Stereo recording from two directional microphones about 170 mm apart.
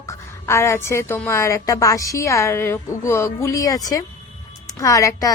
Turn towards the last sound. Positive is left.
turn(degrees=20)  # may be behind; listen again after turning